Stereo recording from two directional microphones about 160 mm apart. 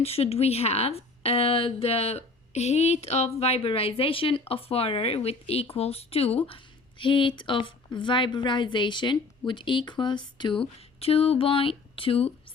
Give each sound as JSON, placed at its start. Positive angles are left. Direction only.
{"t": 0.0, "sound": "a woman's voice", "side_deg": 40}